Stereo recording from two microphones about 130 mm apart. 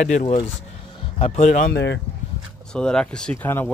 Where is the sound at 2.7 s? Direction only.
5° left (ahead or behind).